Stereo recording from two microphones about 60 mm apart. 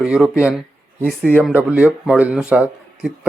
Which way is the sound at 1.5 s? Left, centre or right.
Right.